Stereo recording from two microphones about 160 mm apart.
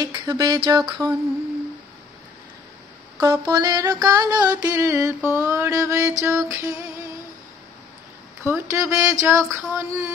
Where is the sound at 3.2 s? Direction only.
20° right (ahead or behind).